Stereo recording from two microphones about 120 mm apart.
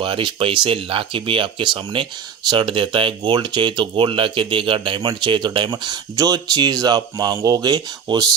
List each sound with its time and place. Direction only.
0.0 s speech: 45° right (ahead or behind)